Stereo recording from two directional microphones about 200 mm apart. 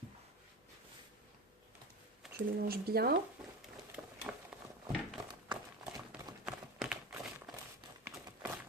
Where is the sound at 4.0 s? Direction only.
10° right (ahead or behind).